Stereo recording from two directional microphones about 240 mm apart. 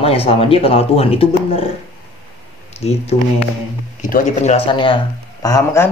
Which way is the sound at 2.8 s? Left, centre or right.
Left.